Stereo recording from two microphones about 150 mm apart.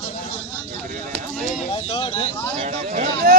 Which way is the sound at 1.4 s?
50° left (ahead or behind).